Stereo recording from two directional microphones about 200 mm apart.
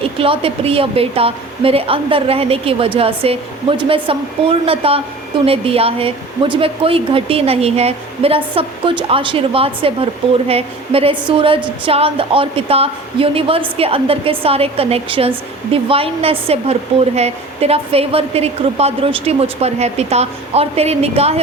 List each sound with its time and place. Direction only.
0.0 s a woman's voice: 25° right (ahead or behind)